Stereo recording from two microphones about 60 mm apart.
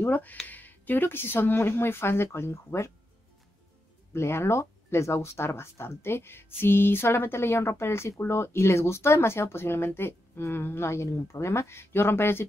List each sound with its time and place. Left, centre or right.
0.0 s speech: left
4.1 s speech: left